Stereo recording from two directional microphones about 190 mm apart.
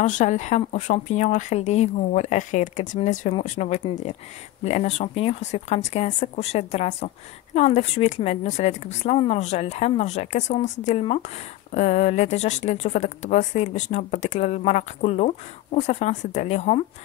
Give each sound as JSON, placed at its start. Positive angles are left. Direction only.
{"t": 0.0, "sound": "speech", "side_deg": 40}